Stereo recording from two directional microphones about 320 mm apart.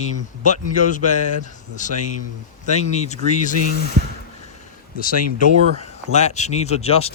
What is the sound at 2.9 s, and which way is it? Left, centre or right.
Speech, left.